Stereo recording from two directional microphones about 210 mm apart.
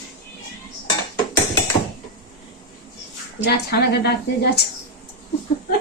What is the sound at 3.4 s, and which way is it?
A woman's voice, 50° left (ahead or behind).